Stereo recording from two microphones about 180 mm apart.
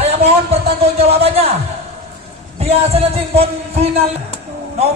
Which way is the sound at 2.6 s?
35° right (ahead or behind).